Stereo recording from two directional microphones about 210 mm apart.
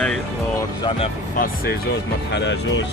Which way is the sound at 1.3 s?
45° left (ahead or behind).